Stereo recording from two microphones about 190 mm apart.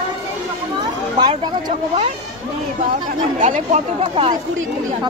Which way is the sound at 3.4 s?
35° right (ahead or behind).